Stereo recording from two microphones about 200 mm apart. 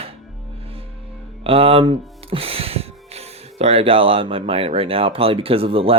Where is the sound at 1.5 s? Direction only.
30° right (ahead or behind).